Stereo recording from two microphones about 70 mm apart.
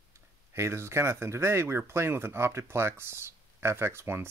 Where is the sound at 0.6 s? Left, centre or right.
Right.